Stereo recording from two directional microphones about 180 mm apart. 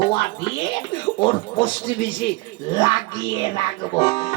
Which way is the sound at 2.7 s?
25° left (ahead or behind).